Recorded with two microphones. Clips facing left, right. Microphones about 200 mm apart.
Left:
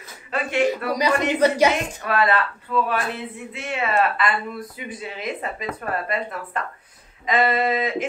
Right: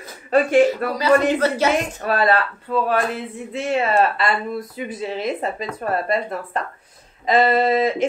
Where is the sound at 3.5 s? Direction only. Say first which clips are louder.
Right 5 dB; 35° right (ahead or behind).